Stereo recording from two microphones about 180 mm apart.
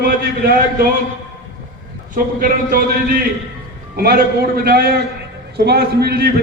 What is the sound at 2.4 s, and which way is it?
Speech, 50° right (ahead or behind).